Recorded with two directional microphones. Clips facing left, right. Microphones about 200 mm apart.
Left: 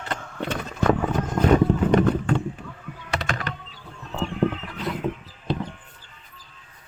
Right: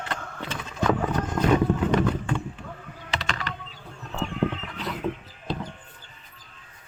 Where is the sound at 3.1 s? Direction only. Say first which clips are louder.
Left 3 dB; 55° left (ahead or behind).